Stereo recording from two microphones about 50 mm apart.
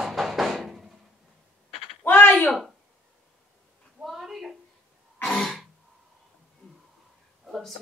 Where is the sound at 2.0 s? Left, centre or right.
Left.